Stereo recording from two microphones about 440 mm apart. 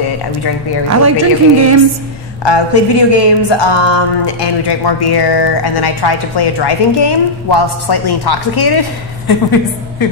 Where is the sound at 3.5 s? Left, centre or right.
Left.